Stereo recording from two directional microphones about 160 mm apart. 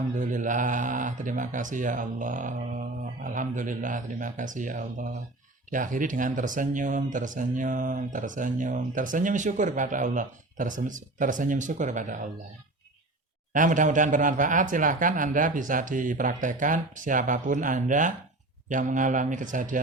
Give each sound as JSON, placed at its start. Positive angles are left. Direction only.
{"t": 0.2, "sound": "speech", "side_deg": -55}
{"t": 13.5, "sound": "speech", "side_deg": -55}